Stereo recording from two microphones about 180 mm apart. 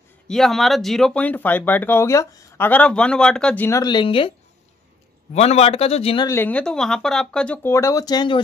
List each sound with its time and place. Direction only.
0.3 s speech: centre (ahead or behind); by 4.3 s 30° left (ahead or behind)
5.3 s a man's voice: 35° left (ahead or behind)
6.2 s speech: 10° left (ahead or behind)